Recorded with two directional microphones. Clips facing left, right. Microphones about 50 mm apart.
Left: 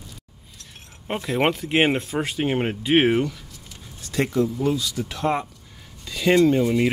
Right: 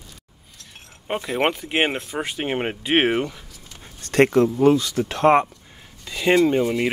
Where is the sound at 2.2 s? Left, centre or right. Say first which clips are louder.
Right 1 dB; centre.